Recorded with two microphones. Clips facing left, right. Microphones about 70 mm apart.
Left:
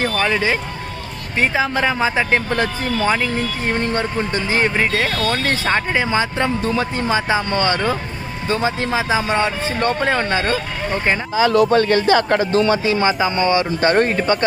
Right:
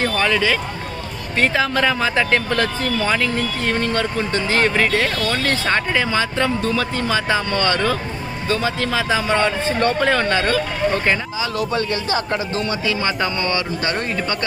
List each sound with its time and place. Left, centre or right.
0.0 s a man's voice: left
11.3 s speech: left
12.7 s speech: left
13.4 s a man's voice: centre
13.8 s speech: left